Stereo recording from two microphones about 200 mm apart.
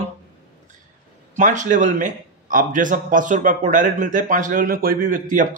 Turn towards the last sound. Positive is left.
turn(degrees=-40)  # may be behind; listen again after turning